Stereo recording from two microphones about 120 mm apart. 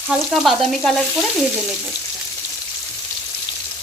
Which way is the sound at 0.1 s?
Centre (ahead or behind).